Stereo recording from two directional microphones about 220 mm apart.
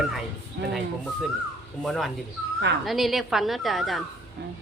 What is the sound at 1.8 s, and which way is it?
A man's voice, centre (ahead or behind).